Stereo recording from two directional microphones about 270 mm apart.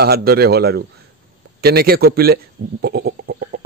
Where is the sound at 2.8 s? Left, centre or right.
Right.